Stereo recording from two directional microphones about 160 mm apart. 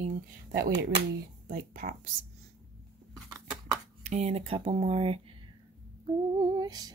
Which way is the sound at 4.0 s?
45° right (ahead or behind).